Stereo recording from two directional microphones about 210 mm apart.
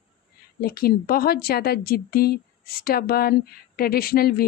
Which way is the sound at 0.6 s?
45° left (ahead or behind).